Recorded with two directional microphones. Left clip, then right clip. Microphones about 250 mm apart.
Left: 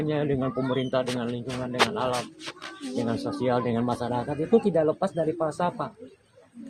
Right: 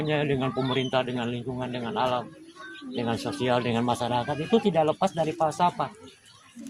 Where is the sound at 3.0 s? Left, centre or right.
Right.